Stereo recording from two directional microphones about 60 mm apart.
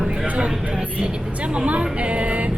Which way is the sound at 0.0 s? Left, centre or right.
Centre.